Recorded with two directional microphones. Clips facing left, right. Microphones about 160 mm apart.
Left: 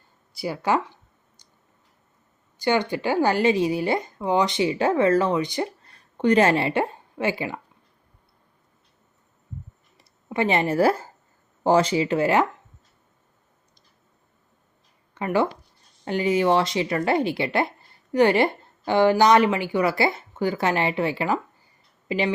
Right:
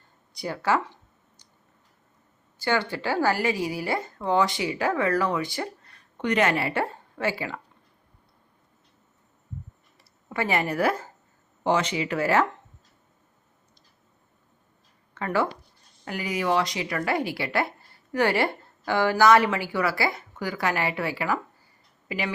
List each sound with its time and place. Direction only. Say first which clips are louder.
0.3 s speech: left 2 dB; 10° left (ahead or behind)
2.6 s a woman's voice: left 4 dB; 15° left (ahead or behind)
5.8 s a woman's voice: left 7 dB; 30° left (ahead or behind)
10.0 s a woman's voice: left 5 dB; 20° left (ahead or behind)
15.1 s speech: left 3 dB; 15° left (ahead or behind)
16.0 s a woman's voice: left 6 dB; 25° left (ahead or behind)